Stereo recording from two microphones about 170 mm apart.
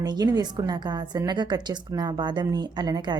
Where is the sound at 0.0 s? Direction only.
25° right (ahead or behind).